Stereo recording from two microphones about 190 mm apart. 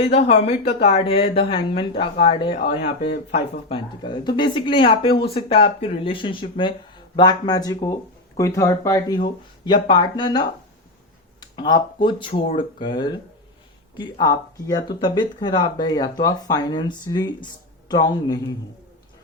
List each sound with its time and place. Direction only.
0.0 s speech: 30° left (ahead or behind)
3.7 s speech: 25° left (ahead or behind)